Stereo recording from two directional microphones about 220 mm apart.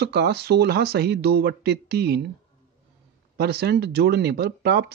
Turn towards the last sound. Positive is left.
turn(degrees=-45)  # may be behind; listen again after turning